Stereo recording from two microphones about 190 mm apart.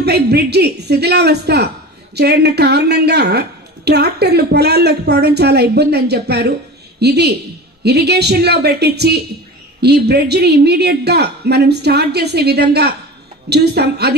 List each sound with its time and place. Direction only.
0.0 s a woman's voice: 60° right (ahead or behind)